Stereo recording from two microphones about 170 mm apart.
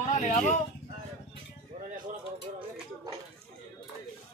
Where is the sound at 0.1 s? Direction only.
45° left (ahead or behind).